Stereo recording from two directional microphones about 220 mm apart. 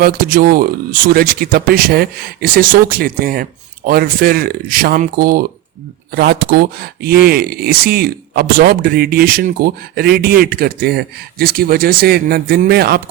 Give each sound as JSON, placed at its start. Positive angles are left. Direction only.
{"t": 0.0, "sound": "speech", "side_deg": -40}